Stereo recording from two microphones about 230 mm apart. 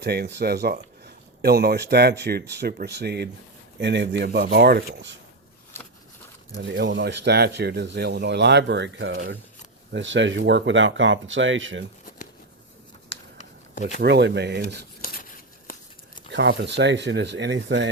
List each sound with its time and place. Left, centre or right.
0.0 s speech: right
6.5 s speech: right
14.0 s speech: right
16.3 s speech: right